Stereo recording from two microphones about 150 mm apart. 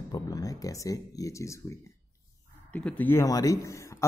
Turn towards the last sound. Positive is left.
turn(degrees=20)  # may be behind; listen again after turning